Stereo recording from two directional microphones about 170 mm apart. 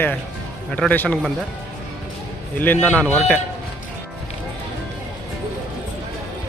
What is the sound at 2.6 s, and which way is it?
Speech, 10° left (ahead or behind).